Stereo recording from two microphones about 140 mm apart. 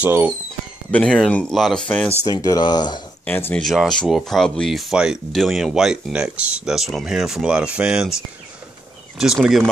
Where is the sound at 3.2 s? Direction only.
15° left (ahead or behind).